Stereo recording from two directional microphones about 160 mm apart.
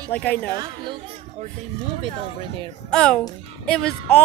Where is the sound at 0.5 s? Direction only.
30° right (ahead or behind).